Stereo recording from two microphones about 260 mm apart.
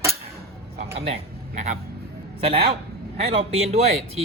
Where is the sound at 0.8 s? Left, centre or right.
Right.